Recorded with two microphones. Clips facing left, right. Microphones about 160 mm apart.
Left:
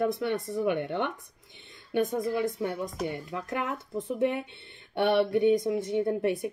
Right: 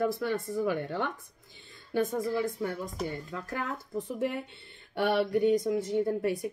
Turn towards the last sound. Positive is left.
turn(degrees=25)  # may be behind; listen again after turning